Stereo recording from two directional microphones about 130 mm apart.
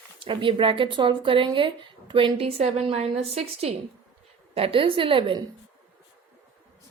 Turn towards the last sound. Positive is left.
turn(degrees=-40)  # may be behind; listen again after turning